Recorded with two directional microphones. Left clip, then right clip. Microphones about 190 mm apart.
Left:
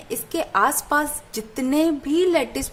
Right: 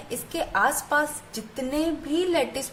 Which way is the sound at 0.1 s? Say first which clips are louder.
Left 4 dB; 35° left (ahead or behind).